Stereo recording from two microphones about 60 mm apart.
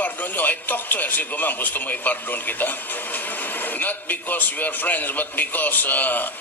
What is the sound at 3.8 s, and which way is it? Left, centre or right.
A man's voice, left.